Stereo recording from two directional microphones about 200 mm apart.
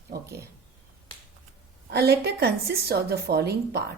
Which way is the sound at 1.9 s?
55° right (ahead or behind).